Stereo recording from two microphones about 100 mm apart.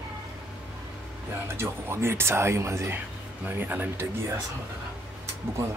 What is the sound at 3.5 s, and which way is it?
Speech, 20° right (ahead or behind).